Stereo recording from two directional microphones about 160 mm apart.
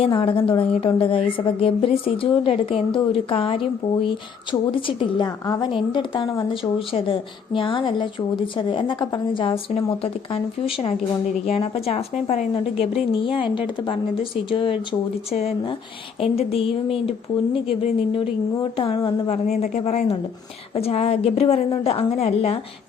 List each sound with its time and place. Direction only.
0.0 s a woman's voice: 35° left (ahead or behind)